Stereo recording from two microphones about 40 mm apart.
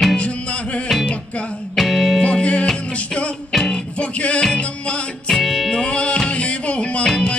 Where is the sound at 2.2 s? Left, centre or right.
Left.